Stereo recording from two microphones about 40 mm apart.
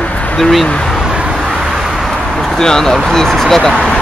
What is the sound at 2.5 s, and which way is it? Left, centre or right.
Speech, centre.